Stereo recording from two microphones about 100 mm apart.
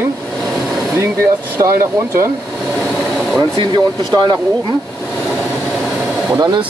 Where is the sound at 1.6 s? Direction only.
30° right (ahead or behind).